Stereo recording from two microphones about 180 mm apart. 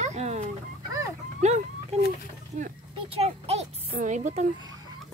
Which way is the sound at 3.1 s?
35° right (ahead or behind).